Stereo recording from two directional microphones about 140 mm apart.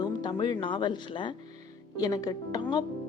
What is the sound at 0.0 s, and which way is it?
Speech, 30° left (ahead or behind).